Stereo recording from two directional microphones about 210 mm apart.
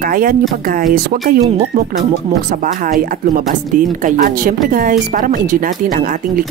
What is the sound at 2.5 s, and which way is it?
Speech, 40° right (ahead or behind).